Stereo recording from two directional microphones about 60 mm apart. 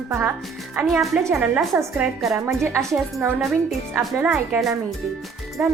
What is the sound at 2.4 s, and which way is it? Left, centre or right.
Speech, right.